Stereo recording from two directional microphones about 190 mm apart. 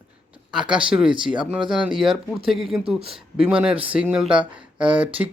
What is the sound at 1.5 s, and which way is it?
Speech, 5° right (ahead or behind).